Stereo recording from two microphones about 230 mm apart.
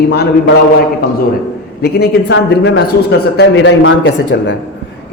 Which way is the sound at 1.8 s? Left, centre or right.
Left.